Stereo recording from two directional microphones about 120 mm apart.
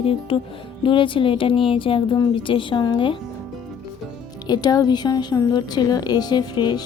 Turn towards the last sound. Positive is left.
turn(degrees=35)  # may be behind; listen again after turning